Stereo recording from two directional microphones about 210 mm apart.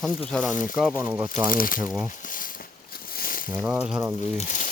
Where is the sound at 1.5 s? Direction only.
40° left (ahead or behind).